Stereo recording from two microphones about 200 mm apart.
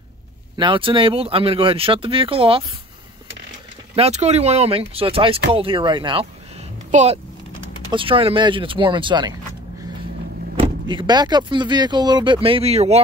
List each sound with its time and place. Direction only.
0.6 s speech: 25° right (ahead or behind)
3.9 s speech: 30° right (ahead or behind)
6.9 s speech: 35° right (ahead or behind)
10.6 s speech: 25° right (ahead or behind)